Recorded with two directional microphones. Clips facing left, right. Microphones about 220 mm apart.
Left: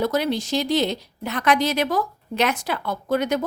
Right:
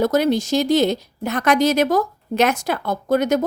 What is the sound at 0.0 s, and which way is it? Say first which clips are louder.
A woman's voice: right 5 dB; 45° right (ahead or behind).